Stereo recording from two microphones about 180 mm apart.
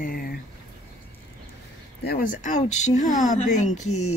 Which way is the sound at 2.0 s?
55° left (ahead or behind).